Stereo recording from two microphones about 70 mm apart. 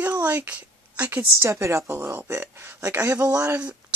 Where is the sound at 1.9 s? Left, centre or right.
Right.